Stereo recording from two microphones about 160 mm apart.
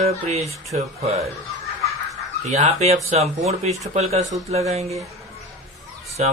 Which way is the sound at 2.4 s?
45° right (ahead or behind).